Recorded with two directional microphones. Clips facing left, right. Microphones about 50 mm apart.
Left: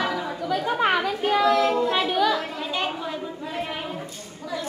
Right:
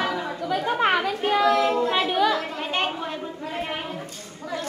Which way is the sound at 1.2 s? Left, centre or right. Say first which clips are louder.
Even; centre.